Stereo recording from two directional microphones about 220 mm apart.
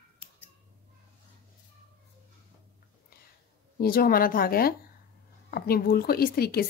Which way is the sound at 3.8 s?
40° left (ahead or behind).